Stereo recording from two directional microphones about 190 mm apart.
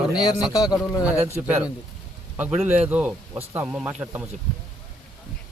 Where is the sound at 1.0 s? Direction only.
10° right (ahead or behind).